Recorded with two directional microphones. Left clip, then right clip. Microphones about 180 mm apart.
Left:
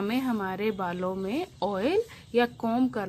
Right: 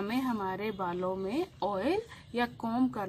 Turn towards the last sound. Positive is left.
turn(degrees=40)  # may be behind; listen again after turning